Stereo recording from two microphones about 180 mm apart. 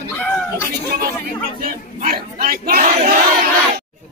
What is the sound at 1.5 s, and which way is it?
Battle cry, 55° right (ahead or behind).